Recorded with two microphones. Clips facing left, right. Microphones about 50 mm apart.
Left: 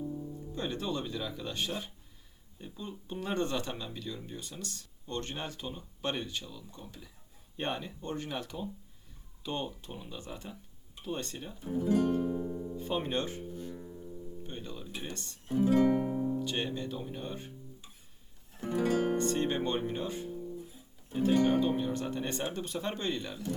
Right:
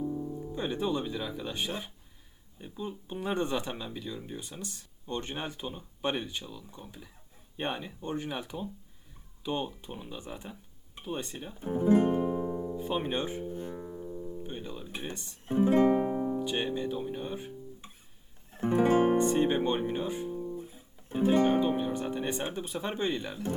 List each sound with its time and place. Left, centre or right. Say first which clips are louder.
0.0 s music: right 5 dB; right
0.5 s speech: right 4 dB; centre
11.5 s music: right 5 dB; right
12.7 s speech: left 1 dB; centre
13.5 s music: right 4 dB; right
14.4 s guitar: right 3 dB; centre
15.1 s speech: right 1 dB; centre
15.4 s music: right 2 dB; right
16.4 s speech: right 3 dB; centre
18.5 s music: right 5 dB; right
19.1 s speech: right 5 dB; centre
20.4 s music: right 4 dB; right
21.6 s speech: right 2 dB; centre